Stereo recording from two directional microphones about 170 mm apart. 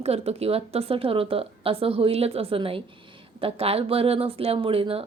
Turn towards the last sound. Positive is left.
turn(degrees=-35)  # may be behind; listen again after turning